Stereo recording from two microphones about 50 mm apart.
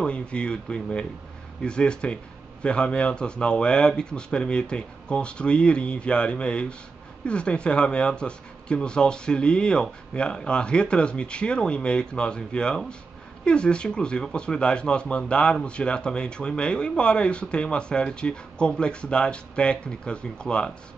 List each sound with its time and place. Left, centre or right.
0.0 s speech: left